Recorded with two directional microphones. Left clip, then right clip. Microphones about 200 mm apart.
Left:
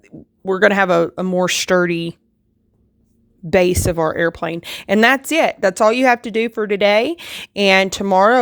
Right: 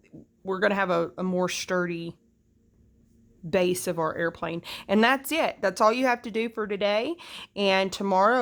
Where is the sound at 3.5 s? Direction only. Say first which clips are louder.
Left 10 dB; 35° left (ahead or behind).